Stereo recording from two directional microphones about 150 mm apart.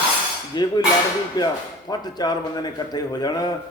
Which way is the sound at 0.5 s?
30° left (ahead or behind).